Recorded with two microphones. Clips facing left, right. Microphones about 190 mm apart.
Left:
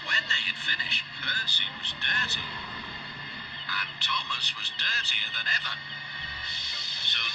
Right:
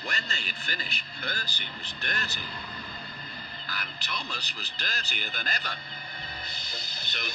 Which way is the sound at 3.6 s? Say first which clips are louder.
Even; 40° right (ahead or behind).